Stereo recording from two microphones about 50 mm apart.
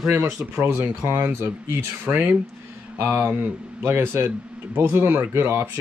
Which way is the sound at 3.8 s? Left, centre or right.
Right.